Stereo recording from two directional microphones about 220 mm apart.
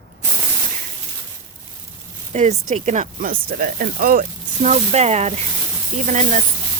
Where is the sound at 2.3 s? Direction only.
30° right (ahead or behind).